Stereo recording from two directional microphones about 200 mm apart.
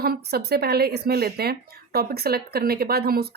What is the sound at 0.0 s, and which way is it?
A woman's voice, 50° right (ahead or behind).